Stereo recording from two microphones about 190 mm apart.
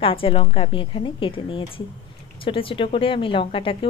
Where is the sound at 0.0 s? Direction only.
30° left (ahead or behind).